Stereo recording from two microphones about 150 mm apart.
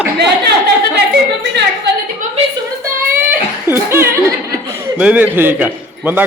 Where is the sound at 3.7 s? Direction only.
15° right (ahead or behind).